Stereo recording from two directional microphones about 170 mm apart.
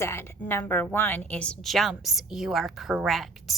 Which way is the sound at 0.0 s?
15° left (ahead or behind).